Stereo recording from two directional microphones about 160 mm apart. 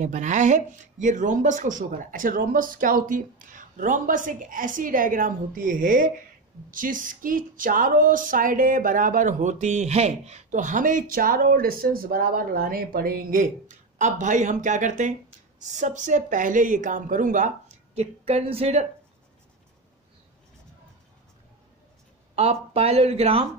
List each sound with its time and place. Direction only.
0.0 s a woman's voice: 50° right (ahead or behind)
17.9 s speech: 40° right (ahead or behind)
22.3 s speech: 40° right (ahead or behind)